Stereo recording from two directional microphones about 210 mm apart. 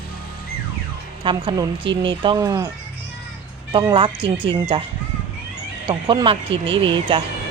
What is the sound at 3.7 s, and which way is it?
Speech, 25° right (ahead or behind).